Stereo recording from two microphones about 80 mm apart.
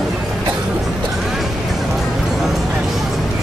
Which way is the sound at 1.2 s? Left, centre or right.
Centre.